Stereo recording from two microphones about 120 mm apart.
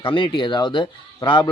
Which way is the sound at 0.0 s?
45° left (ahead or behind).